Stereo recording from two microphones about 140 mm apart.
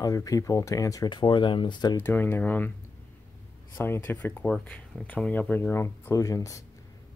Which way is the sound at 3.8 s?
15° left (ahead or behind).